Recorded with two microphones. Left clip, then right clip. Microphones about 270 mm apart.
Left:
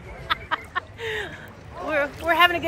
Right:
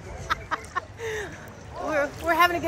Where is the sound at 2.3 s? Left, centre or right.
Centre.